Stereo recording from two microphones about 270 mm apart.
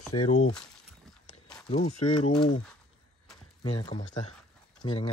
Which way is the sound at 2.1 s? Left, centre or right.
Left.